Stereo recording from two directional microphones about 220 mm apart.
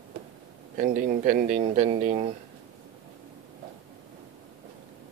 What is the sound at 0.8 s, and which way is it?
Speech, 40° right (ahead or behind).